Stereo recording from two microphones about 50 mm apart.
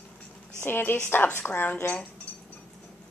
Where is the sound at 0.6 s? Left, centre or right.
Left.